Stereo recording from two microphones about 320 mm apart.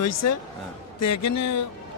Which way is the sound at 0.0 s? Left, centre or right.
Left.